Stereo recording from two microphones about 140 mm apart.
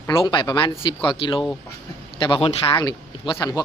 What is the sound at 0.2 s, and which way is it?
Speech, 35° left (ahead or behind).